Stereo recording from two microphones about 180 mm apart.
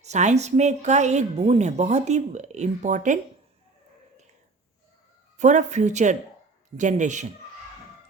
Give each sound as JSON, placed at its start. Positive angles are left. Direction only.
{"t": 0.0, "sound": "a woman's voice", "side_deg": -40}
{"t": 5.4, "sound": "a woman's voice", "side_deg": -40}